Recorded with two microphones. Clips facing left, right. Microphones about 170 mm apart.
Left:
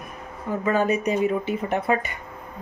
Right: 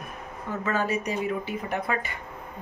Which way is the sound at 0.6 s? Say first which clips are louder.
Left 6 dB; 15° left (ahead or behind).